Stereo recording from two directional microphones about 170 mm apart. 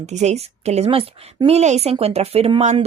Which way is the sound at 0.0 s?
40° right (ahead or behind).